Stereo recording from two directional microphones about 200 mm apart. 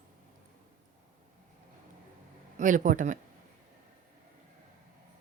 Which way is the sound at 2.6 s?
40° right (ahead or behind).